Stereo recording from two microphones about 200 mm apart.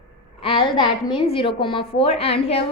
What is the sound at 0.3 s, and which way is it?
A woman's voice, 25° left (ahead or behind).